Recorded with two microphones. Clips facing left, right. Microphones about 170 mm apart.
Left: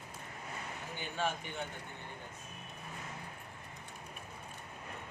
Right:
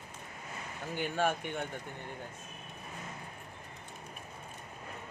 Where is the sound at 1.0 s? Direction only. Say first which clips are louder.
Right 6 dB; 55° right (ahead or behind).